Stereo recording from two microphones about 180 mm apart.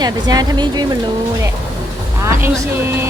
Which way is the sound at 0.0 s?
20° right (ahead or behind).